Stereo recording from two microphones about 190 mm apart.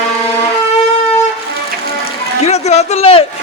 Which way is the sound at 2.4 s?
35° left (ahead or behind).